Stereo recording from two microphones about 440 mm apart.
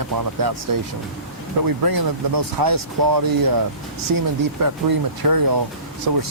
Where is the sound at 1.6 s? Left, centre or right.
Right.